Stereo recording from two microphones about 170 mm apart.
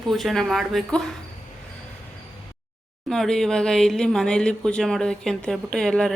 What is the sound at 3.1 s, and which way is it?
A woman's voice, 5° left (ahead or behind).